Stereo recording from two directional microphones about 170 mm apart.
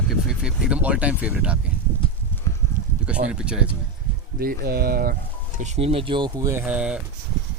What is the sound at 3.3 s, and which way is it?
Speech, 5° right (ahead or behind).